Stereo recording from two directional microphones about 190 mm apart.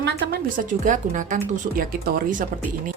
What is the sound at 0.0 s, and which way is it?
A woman's voice, 50° right (ahead or behind).